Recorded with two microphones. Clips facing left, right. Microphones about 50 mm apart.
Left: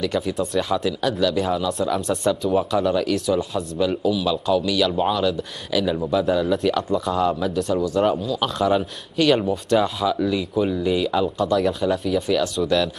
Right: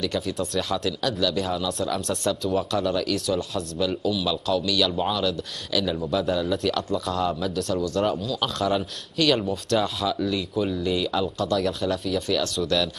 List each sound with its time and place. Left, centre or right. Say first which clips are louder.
0.0 s speech: left 4 dB; centre
6.4 s speech: left 4 dB; centre